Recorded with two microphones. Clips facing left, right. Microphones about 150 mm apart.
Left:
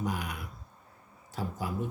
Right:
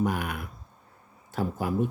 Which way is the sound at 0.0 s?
55° right (ahead or behind).